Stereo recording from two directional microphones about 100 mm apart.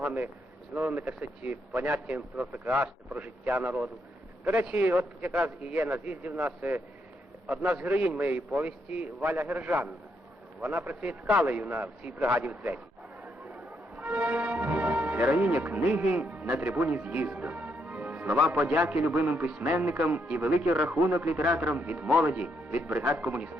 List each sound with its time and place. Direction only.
0.0 s a man's voice: 15° right (ahead or behind)
13.2 s music: 15° right (ahead or behind)
15.6 s a man's voice: 20° right (ahead or behind)
16.6 s music: 15° right (ahead or behind)
18.3 s a man's voice: 5° right (ahead or behind)
18.6 s a man's voice: 15° right (ahead or behind)
19.5 s a man's voice: 10° right (ahead or behind)